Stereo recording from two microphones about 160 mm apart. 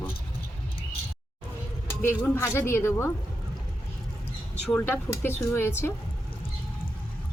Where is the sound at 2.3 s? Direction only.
15° left (ahead or behind).